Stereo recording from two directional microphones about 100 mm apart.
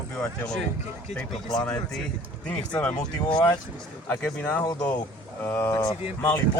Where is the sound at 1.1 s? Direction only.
5° left (ahead or behind).